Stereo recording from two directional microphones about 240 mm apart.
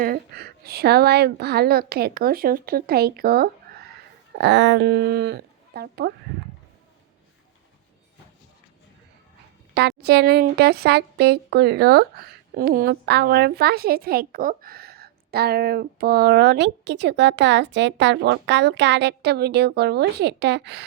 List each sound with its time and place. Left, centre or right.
0.0 s a woman's voice: right
9.7 s speech: right